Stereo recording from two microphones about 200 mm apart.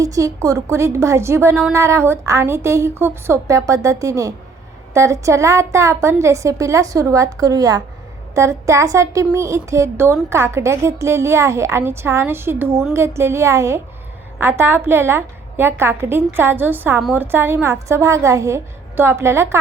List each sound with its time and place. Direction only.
0.0 s a woman's voice: 15° right (ahead or behind)